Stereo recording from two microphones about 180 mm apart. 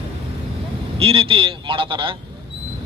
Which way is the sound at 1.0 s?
30° right (ahead or behind).